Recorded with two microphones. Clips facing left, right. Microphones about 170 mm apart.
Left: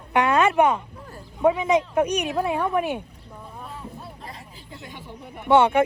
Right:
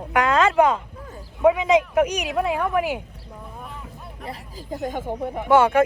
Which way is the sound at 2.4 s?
25° left (ahead or behind).